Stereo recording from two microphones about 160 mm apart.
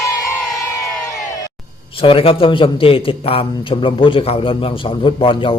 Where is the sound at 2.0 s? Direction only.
35° left (ahead or behind).